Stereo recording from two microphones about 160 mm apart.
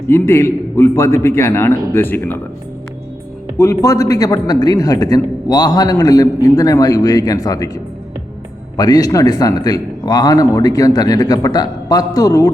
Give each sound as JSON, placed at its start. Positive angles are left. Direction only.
{"t": 0.1, "sound": "a man's voice", "side_deg": 15}
{"t": 3.6, "sound": "a man's voice", "side_deg": 20}
{"t": 8.7, "sound": "a man's voice", "side_deg": 25}